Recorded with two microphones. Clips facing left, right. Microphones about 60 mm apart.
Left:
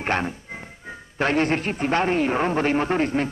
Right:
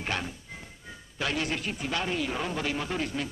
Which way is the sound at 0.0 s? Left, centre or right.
Left.